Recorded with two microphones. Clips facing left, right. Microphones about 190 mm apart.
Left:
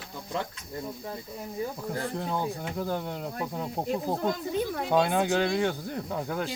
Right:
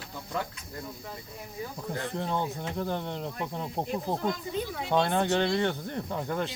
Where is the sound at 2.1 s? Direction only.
5° left (ahead or behind).